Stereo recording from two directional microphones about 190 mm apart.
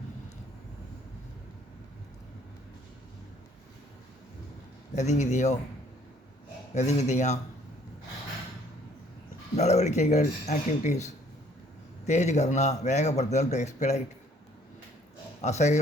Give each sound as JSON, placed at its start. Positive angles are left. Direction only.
{"t": 4.9, "sound": "speech", "side_deg": 35}
{"t": 6.7, "sound": "speech", "side_deg": 35}
{"t": 9.6, "sound": "speech", "side_deg": 35}
{"t": 15.4, "sound": "speech", "side_deg": 35}